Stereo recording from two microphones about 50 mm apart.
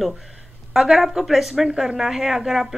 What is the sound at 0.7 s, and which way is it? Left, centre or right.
A woman's voice, centre.